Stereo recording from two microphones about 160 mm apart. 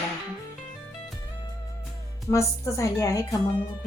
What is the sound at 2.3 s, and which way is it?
Speech, 20° left (ahead or behind).